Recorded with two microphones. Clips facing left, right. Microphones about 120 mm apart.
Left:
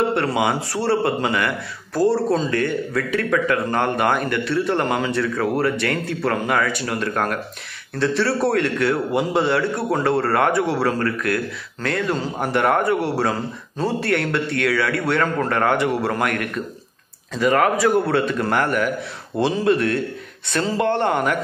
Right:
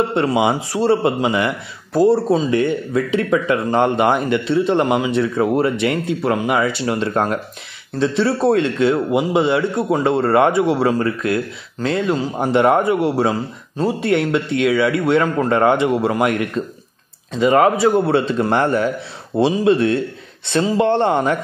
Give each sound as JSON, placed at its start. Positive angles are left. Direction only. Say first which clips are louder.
{"t": 0.1, "sound": "speech", "louder": "right 3 dB", "side_deg": -20}